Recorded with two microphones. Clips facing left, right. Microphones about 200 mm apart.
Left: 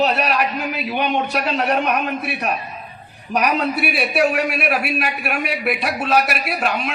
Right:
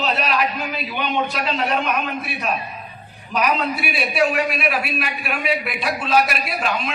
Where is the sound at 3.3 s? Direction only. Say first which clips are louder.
Left 2 dB; 65° left (ahead or behind).